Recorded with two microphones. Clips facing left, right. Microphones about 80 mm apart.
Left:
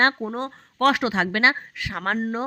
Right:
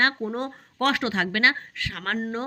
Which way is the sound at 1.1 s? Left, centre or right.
Left.